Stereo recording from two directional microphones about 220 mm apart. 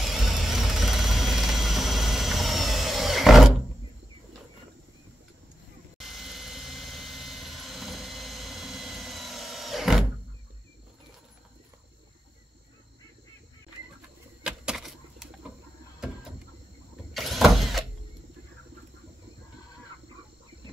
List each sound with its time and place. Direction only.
0.0 s vehicle: centre (ahead or behind)
5.9 s vehicle: centre (ahead or behind)
14.4 s a sound: 5° right (ahead or behind)
17.1 s vehicle: centre (ahead or behind)